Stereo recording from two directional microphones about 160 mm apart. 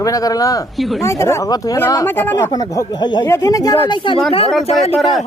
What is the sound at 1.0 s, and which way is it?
Speech, 15° left (ahead or behind).